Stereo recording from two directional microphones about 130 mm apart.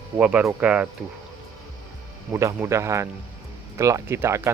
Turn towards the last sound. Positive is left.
turn(degrees=-20)  # may be behind; listen again after turning